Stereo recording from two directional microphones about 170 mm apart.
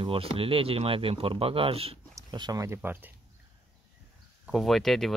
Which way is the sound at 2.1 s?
25° right (ahead or behind).